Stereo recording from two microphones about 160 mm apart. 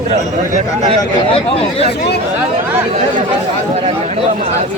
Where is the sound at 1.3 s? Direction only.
35° left (ahead or behind).